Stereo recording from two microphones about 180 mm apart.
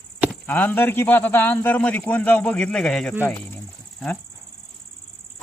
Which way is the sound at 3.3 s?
10° left (ahead or behind).